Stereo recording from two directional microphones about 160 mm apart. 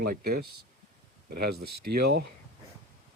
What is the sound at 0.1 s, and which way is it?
Speech, 70° right (ahead or behind).